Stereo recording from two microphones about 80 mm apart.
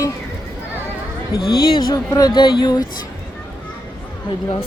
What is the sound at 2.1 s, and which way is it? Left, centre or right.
Speech, left.